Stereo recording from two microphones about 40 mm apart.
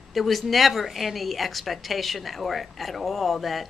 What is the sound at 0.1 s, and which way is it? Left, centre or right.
A woman's voice, centre.